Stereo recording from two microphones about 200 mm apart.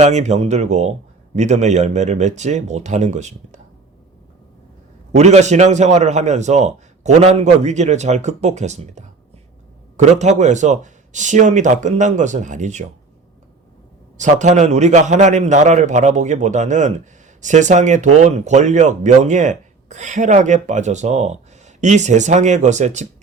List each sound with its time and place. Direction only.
0.0 s speech: 35° right (ahead or behind)
5.1 s speech: 35° right (ahead or behind)
14.2 s speech: 35° right (ahead or behind)